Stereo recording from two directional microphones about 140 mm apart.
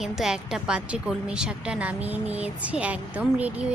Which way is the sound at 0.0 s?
5° right (ahead or behind).